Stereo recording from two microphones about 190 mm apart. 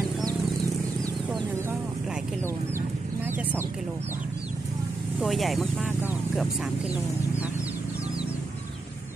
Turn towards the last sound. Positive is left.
turn(degrees=-5)  # may be behind; listen again after turning